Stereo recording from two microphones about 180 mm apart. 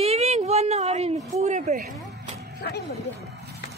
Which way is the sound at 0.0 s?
35° right (ahead or behind).